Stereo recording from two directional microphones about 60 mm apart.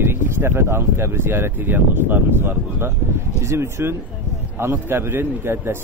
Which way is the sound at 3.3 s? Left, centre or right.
Right.